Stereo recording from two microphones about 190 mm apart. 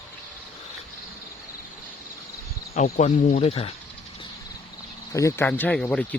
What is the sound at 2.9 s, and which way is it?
Speech, 40° left (ahead or behind).